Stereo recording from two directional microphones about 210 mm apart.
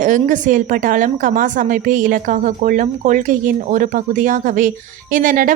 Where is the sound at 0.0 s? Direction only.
40° right (ahead or behind).